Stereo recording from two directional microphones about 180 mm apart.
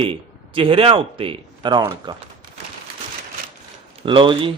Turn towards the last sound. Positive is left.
turn(degrees=-25)  # may be behind; listen again after turning